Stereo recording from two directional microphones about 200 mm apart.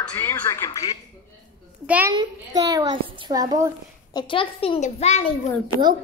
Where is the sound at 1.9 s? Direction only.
10° right (ahead or behind).